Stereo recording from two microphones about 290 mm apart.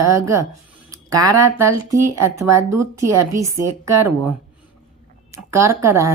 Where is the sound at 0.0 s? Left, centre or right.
Centre.